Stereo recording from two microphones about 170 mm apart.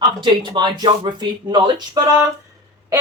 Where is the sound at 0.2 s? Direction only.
25° right (ahead or behind).